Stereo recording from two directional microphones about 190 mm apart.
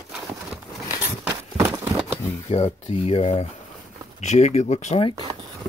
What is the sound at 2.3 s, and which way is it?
Speech, 35° left (ahead or behind).